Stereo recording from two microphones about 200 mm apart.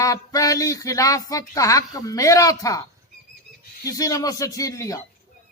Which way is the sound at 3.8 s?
15° left (ahead or behind).